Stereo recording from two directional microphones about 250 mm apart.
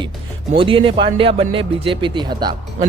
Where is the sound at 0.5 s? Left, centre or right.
Right.